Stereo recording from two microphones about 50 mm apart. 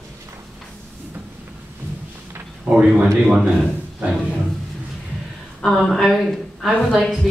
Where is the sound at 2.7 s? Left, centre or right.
Right.